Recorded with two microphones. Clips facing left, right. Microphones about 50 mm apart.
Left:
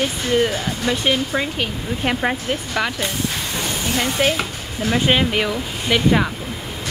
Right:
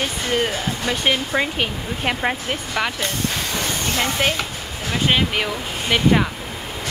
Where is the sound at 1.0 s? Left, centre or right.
Centre.